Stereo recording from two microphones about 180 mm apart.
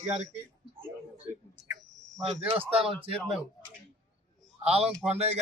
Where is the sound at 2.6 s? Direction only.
5° right (ahead or behind).